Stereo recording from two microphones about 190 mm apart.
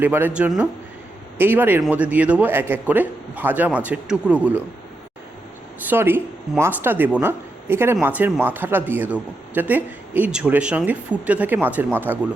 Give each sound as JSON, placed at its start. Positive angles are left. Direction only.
{"t": 0.0, "sound": "speech", "side_deg": -10}
{"t": 5.9, "sound": "speech", "side_deg": -10}